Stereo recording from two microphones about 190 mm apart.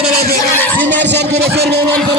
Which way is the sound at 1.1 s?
60° right (ahead or behind).